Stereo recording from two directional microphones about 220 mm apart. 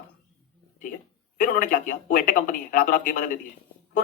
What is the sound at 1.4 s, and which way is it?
Speech, 40° left (ahead or behind).